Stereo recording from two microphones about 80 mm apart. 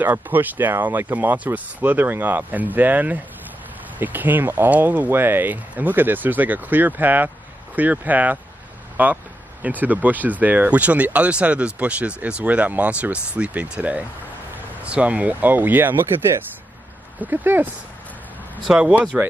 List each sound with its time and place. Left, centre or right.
0.0 s speech: right
18.7 s speech: centre